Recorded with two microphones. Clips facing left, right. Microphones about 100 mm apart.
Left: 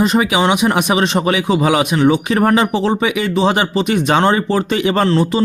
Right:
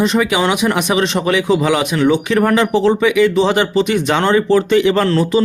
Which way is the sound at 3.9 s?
35° left (ahead or behind).